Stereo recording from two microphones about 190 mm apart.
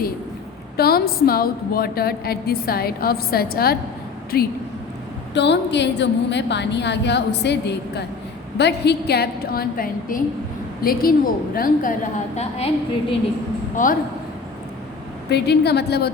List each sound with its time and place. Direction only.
0.8 s a woman's voice: 55° left (ahead or behind)
5.3 s a woman's voice: 65° left (ahead or behind); by 11.9 s 45° left (ahead or behind)
12.4 s a woman's voice: 35° left (ahead or behind)
15.3 s a woman's voice: 60° left (ahead or behind)